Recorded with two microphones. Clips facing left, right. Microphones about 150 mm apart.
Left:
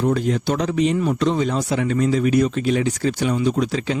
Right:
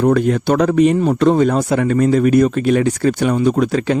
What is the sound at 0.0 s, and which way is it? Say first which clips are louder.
Speech: right 6 dB; 60° right (ahead or behind).